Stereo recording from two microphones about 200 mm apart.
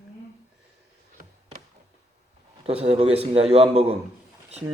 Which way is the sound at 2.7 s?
30° right (ahead or behind).